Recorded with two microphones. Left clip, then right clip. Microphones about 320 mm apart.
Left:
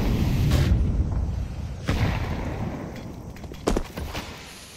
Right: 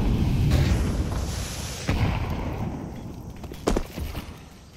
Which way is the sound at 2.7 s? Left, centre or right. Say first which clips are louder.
Left 2 dB; centre.